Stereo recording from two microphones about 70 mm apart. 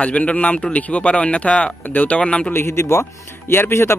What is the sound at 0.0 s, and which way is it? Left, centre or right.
A man's voice, centre.